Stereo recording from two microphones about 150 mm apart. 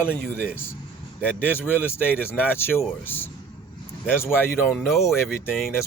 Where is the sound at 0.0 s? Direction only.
15° left (ahead or behind).